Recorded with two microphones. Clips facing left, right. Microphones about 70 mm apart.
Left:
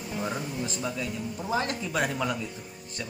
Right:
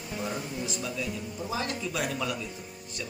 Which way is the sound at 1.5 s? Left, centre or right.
Left.